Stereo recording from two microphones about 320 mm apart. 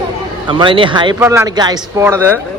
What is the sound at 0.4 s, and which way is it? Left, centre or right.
Speech, centre.